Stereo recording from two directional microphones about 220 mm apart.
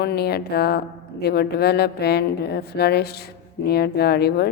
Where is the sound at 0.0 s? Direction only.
45° left (ahead or behind).